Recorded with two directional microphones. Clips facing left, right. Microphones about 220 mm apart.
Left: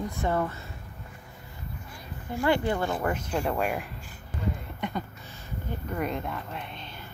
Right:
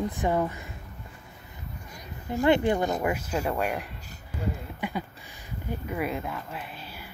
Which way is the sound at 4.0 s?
40° right (ahead or behind).